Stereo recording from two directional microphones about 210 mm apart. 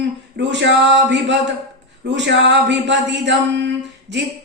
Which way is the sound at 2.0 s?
55° right (ahead or behind).